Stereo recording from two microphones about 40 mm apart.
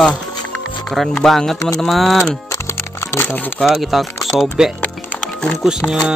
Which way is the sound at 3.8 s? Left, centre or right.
Centre.